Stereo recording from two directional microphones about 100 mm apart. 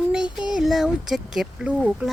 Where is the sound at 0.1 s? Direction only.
10° right (ahead or behind).